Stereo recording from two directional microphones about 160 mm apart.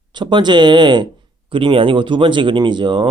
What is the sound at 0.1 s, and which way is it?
Speech, 30° right (ahead or behind).